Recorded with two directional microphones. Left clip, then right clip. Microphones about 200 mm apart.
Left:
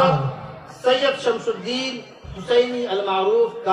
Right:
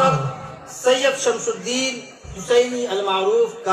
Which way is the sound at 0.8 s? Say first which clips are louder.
Right 1 dB; 55° left (ahead or behind).